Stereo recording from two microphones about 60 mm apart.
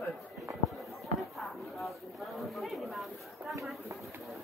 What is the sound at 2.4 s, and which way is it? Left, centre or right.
Speech, centre.